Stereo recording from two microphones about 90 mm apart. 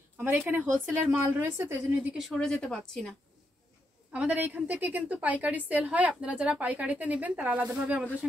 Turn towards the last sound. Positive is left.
turn(degrees=-15)  # may be behind; listen again after turning